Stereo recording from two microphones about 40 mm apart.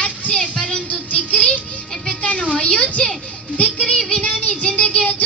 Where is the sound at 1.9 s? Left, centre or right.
Centre.